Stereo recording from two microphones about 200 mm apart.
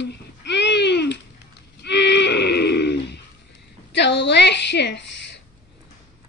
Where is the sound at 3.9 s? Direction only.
60° left (ahead or behind).